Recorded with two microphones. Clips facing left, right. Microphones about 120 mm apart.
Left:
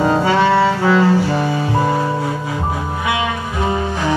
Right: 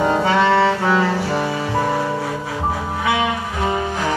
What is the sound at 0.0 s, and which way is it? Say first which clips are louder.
Saxophone: left 2 dB; 30° left (ahead or behind).